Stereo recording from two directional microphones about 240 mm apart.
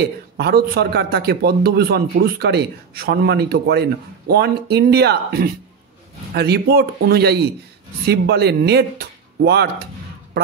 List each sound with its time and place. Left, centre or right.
0.0 s a man's voice: right